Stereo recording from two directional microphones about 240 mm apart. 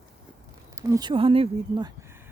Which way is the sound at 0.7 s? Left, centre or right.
Centre.